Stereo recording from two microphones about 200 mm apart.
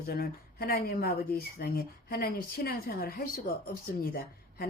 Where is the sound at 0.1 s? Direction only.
50° left (ahead or behind).